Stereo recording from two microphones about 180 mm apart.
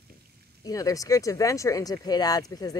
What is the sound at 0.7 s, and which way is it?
Speech, 20° left (ahead or behind).